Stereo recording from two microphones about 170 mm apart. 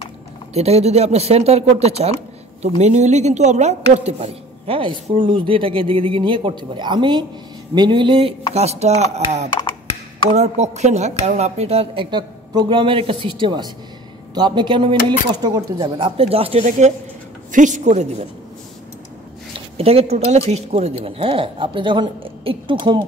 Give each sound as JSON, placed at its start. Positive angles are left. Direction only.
{"t": 0.6, "sound": "a woman's voice", "side_deg": -40}
{"t": 19.8, "sound": "speech", "side_deg": -35}